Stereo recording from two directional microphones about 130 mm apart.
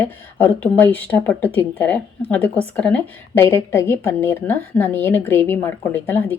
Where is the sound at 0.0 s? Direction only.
15° left (ahead or behind).